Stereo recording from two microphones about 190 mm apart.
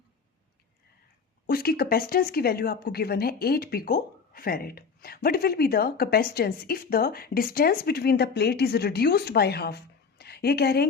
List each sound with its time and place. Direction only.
1.5 s speech: 50° left (ahead or behind)